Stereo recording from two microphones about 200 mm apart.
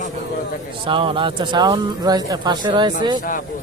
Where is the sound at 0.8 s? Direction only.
25° right (ahead or behind).